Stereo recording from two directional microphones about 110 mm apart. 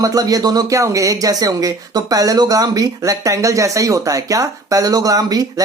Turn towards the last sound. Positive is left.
turn(degrees=-35)  # may be behind; listen again after turning